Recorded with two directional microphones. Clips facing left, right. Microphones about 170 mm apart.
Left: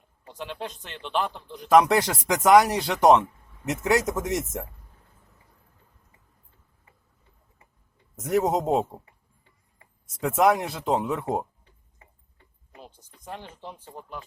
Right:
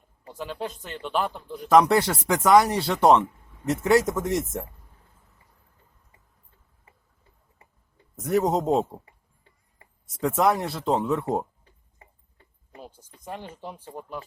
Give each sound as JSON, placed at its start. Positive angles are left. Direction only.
{"t": 0.3, "sound": "speech", "side_deg": -5}
{"t": 1.8, "sound": "speech", "side_deg": 15}
{"t": 8.2, "sound": "speech", "side_deg": 15}
{"t": 10.2, "sound": "speech", "side_deg": 15}
{"t": 12.8, "sound": "speech", "side_deg": -10}